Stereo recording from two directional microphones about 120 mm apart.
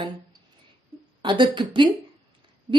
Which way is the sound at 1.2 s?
40° right (ahead or behind).